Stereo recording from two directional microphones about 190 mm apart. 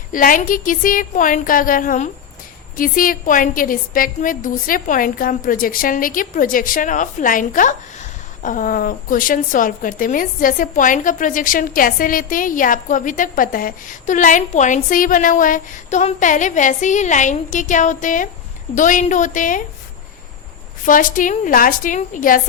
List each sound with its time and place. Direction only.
0.1 s a woman's voice: 45° left (ahead or behind)
20.8 s a woman's voice: 45° left (ahead or behind)